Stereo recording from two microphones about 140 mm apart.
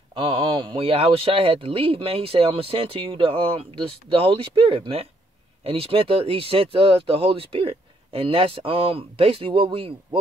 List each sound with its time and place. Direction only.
0.1 s speech: 40° right (ahead or behind)